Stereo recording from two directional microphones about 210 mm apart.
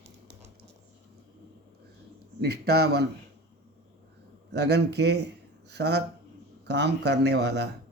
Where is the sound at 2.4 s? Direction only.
50° right (ahead or behind).